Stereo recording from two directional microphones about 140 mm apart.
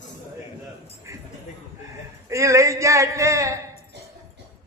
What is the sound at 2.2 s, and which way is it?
A man's voice, 20° right (ahead or behind).